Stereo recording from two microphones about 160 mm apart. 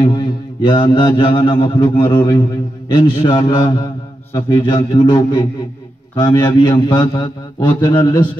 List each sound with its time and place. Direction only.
0.0 s mantra: 30° left (ahead or behind)
3.2 s a man's voice: 25° left (ahead or behind)